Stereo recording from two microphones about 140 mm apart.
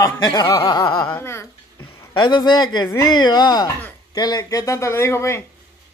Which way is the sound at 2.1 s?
35° left (ahead or behind).